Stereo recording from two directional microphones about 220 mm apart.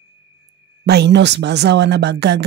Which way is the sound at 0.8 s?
50° right (ahead or behind).